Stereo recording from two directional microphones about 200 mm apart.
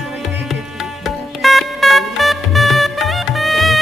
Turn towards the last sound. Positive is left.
turn(degrees=0)  # may be behind; listen again after turning